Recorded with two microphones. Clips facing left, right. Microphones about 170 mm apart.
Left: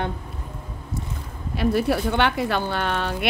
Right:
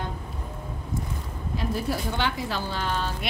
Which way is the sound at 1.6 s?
70° left (ahead or behind).